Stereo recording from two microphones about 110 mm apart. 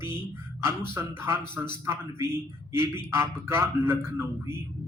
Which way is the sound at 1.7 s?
25° right (ahead or behind).